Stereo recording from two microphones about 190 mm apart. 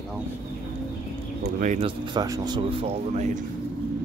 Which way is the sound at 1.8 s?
25° right (ahead or behind).